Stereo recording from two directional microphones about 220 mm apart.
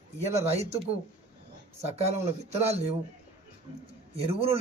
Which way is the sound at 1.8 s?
30° right (ahead or behind).